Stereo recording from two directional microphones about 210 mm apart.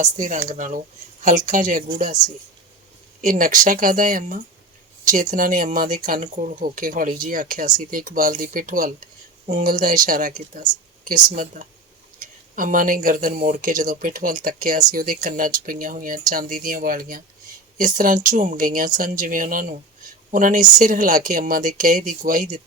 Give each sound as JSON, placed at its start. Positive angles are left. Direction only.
{"t": 0.0, "sound": "speech", "side_deg": -35}
{"t": 3.2, "sound": "speech", "side_deg": -40}